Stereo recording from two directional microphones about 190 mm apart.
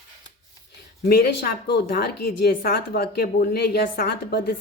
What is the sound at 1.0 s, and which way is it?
A woman's voice, 55° left (ahead or behind).